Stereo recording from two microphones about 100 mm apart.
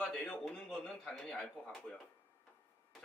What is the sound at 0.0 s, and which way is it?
A man's voice, 10° left (ahead or behind).